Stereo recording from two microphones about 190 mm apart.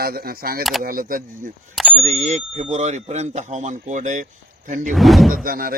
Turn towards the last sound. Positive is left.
turn(degrees=-50)  # may be behind; listen again after turning